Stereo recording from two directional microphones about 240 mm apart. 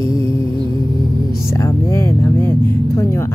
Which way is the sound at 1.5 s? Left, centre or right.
Centre.